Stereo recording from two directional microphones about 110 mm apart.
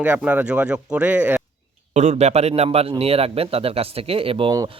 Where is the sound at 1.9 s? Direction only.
90° right.